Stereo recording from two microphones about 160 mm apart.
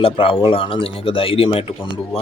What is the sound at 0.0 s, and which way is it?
A man's voice, 35° left (ahead or behind).